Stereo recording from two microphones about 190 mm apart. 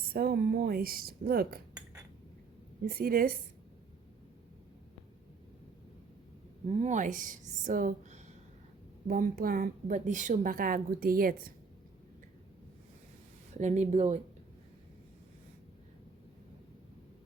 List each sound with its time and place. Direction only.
0.1 s a woman's voice: 50° right (ahead or behind)
2.8 s a woman's voice: 50° right (ahead or behind)
6.7 s a woman's voice: 40° right (ahead or behind)
13.5 s speech: 40° right (ahead or behind)